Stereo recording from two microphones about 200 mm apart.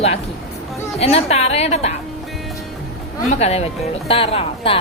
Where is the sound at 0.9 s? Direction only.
30° left (ahead or behind).